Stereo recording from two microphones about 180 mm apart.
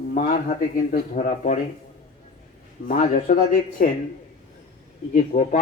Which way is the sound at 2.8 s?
50° left (ahead or behind).